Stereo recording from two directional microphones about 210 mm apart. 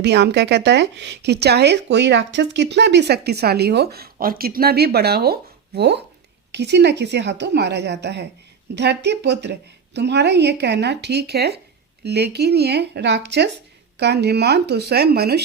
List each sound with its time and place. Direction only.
0.0 s a woman's voice: 55° right (ahead or behind)